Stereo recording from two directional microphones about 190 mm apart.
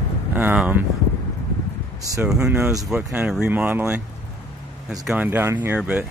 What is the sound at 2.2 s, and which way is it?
Speech, 5° right (ahead or behind).